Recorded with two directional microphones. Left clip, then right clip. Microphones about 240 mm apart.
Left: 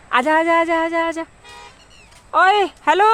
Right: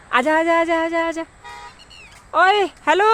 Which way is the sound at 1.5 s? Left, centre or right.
Centre.